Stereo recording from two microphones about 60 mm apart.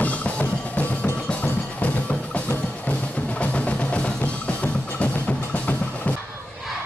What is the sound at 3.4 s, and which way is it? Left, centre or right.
Music, left.